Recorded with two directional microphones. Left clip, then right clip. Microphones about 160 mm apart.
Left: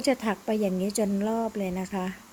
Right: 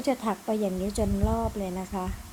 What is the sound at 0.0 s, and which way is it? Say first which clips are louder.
Speech: left 2 dB; 35° left (ahead or behind).